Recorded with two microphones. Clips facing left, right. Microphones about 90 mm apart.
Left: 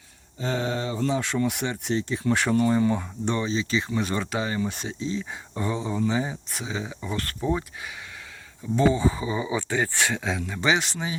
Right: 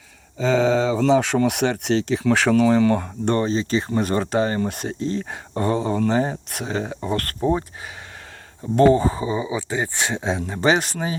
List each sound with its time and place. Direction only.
0.5 s speech: 90° right
3.0 s speech: 50° right (ahead or behind)
8.7 s speech: 55° right (ahead or behind)